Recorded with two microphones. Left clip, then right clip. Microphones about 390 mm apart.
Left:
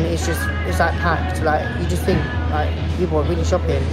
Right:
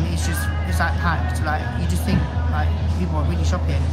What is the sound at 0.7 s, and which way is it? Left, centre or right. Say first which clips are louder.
Speech: left 4 dB; centre.